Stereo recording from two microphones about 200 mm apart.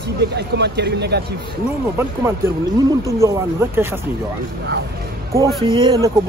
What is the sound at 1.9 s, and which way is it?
Speech, 10° right (ahead or behind).